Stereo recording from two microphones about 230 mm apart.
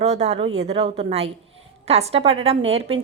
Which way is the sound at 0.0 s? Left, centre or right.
Right.